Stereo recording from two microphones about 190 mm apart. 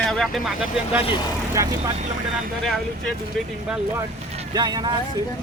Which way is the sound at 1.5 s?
15° right (ahead or behind).